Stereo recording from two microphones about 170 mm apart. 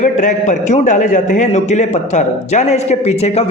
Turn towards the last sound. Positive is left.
turn(degrees=40)  # may be behind; listen again after turning